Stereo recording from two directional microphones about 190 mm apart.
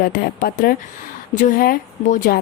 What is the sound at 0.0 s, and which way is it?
A woman's voice, 50° left (ahead or behind).